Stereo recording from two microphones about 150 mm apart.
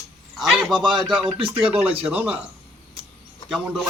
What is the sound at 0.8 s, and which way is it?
Music, 35° right (ahead or behind).